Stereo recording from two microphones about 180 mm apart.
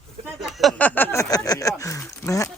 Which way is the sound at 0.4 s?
Centre (ahead or behind).